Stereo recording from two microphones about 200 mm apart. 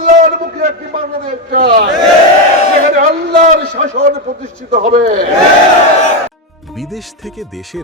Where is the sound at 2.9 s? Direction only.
40° right (ahead or behind).